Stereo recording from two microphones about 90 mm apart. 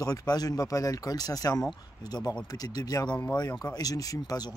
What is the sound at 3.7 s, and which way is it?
Speech, 45° left (ahead or behind).